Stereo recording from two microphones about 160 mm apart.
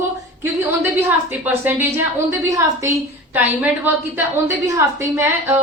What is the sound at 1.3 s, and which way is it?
A woman's voice, 10° right (ahead or behind).